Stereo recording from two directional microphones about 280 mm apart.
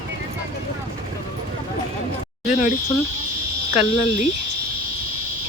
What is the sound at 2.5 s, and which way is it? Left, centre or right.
Speech, left.